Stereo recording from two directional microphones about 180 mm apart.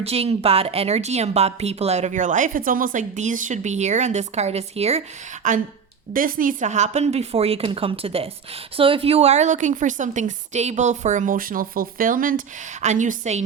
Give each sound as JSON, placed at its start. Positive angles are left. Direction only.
{"t": 0.0, "sound": "a woman's voice", "side_deg": -35}
{"t": 6.1, "sound": "a woman's voice", "side_deg": -50}